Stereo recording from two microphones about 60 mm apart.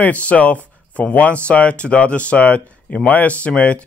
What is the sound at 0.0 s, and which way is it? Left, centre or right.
A man's voice, left.